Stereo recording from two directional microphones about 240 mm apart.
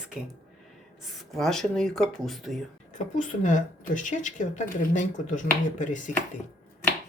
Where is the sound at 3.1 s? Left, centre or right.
Left.